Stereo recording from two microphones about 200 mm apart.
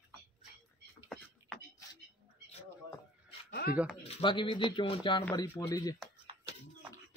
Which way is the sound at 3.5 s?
50° left (ahead or behind).